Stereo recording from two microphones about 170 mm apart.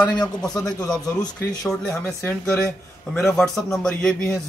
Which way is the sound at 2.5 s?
5° left (ahead or behind).